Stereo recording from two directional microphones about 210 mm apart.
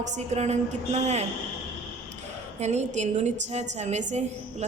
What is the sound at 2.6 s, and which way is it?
A woman's voice, 30° right (ahead or behind).